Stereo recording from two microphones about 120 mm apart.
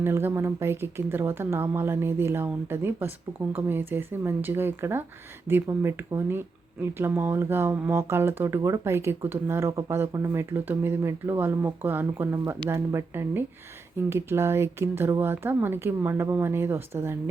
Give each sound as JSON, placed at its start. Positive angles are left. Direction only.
{"t": 0.0, "sound": "speech", "side_deg": -20}